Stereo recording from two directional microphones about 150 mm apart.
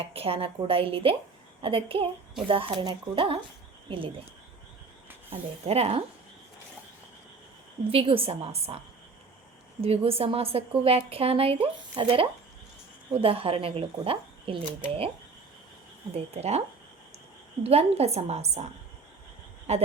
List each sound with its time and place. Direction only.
0.1 s a woman's voice: 40° right (ahead or behind)
5.3 s a woman's voice: 45° right (ahead or behind)
7.9 s a woman's voice: 40° right (ahead or behind)
9.8 s a woman's voice: 40° right (ahead or behind)
16.1 s a woman's voice: 45° right (ahead or behind)
19.7 s a woman's voice: 45° right (ahead or behind)